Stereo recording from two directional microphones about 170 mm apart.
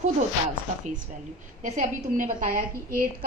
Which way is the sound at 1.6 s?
45° right (ahead or behind).